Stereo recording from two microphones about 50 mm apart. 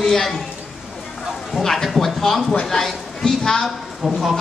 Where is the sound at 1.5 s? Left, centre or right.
Centre.